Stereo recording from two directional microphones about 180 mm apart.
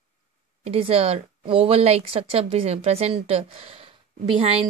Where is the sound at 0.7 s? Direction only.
35° right (ahead or behind).